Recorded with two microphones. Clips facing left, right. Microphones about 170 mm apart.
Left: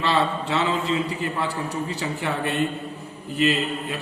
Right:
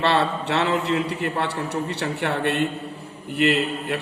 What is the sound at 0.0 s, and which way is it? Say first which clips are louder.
A man's voice: right 1 dB; 70° right (ahead or behind).